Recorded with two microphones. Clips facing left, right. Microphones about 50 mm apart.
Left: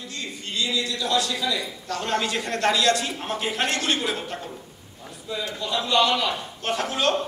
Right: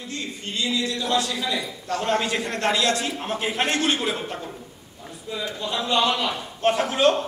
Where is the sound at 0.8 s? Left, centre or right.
Right.